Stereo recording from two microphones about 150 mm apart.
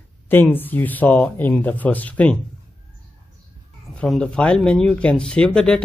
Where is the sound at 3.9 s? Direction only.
5° left (ahead or behind).